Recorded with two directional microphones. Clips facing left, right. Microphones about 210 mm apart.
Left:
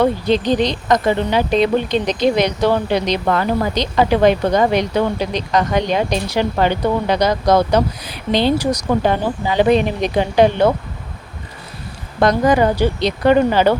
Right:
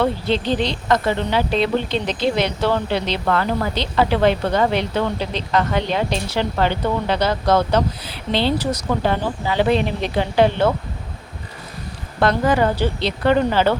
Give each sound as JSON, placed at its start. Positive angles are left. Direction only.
{"t": 0.0, "sound": "speech", "side_deg": 15}
{"t": 12.2, "sound": "speech", "side_deg": 15}